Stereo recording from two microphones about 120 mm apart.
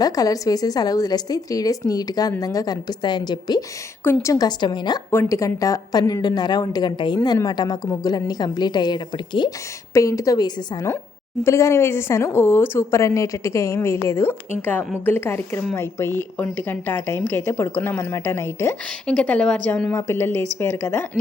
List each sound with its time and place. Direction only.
0.0 s a woman's voice: 30° left (ahead or behind)
4.0 s a woman's voice: 20° left (ahead or behind); by 4.9 s 40° left (ahead or behind)
5.1 s a woman's voice: 25° left (ahead or behind); by 9.5 s 40° left (ahead or behind)
9.9 s a woman's voice: 25° left (ahead or behind)
19.0 s speech: 10° left (ahead or behind)
19.9 s a woman's voice: 25° left (ahead or behind)